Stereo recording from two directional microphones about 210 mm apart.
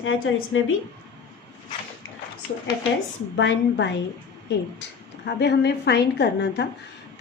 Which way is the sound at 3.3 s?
60° left (ahead or behind).